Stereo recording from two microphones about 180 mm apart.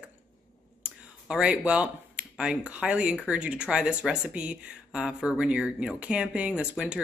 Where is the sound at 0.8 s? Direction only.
5° right (ahead or behind).